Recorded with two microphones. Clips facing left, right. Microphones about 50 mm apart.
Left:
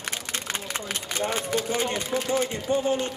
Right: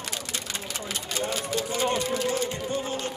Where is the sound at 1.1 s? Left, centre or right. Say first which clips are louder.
Left 3 dB; left.